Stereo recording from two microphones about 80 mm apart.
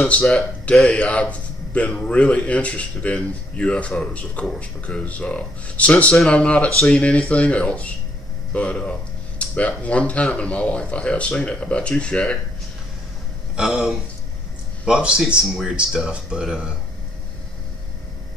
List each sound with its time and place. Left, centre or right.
0.1 s a man's voice: centre
13.6 s speech: centre